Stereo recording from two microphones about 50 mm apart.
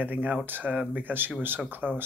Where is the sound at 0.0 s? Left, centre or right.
Right.